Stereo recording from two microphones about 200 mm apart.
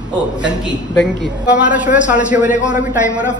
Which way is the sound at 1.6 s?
40° left (ahead or behind).